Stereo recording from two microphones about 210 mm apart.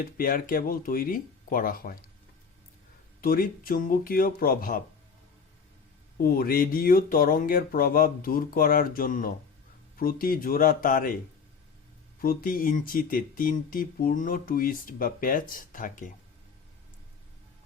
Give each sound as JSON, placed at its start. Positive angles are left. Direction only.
{"t": 0.0, "sound": "speech", "side_deg": 40}
{"t": 3.2, "sound": "speech", "side_deg": 45}
{"t": 6.1, "sound": "speech", "side_deg": 45}
{"t": 12.2, "sound": "speech", "side_deg": 45}